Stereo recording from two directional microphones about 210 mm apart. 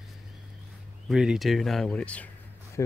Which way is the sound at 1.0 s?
Centre (ahead or behind).